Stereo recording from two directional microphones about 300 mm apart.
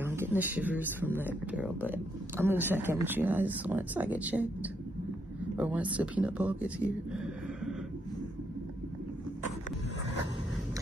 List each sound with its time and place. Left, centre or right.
0.0 s speech: centre